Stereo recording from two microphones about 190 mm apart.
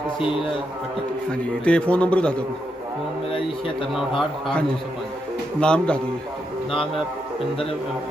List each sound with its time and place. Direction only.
0.2 s a man's voice: 30° left (ahead or behind)
1.3 s a man's voice: 5° left (ahead or behind)
5.5 s speech: 5° left (ahead or behind)